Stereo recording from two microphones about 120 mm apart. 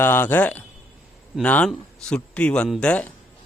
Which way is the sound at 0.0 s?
20° left (ahead or behind).